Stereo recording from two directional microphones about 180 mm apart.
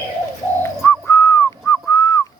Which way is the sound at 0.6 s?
15° left (ahead or behind).